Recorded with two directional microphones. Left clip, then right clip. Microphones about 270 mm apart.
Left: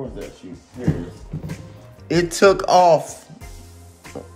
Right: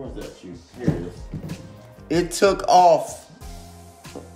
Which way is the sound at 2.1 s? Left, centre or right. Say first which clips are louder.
Left 4 dB; left.